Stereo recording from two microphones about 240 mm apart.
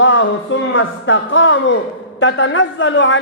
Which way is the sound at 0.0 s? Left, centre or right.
Left.